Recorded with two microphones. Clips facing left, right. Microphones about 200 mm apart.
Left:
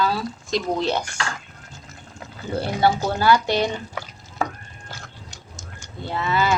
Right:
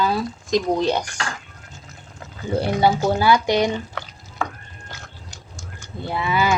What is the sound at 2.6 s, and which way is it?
Speech, 15° right (ahead or behind).